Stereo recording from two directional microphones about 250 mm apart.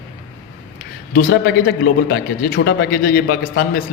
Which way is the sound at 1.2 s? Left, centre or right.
Left.